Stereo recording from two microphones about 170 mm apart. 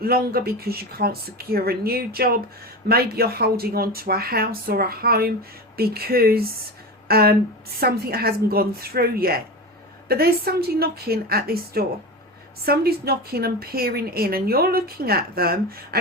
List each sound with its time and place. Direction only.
0.0 s a woman's voice: 60° right (ahead or behind)